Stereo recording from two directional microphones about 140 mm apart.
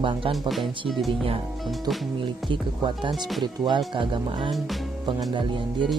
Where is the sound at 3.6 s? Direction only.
35° right (ahead or behind).